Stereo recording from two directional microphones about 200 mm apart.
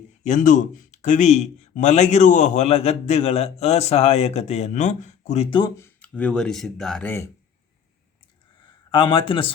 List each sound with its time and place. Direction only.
0.3 s speech: 40° left (ahead or behind); by 7.3 s 10° left (ahead or behind)
8.9 s a man's voice: 25° left (ahead or behind)